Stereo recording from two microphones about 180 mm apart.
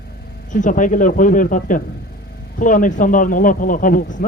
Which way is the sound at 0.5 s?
45° left (ahead or behind).